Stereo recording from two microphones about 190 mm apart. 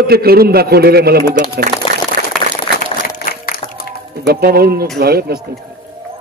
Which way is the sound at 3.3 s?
50° left (ahead or behind).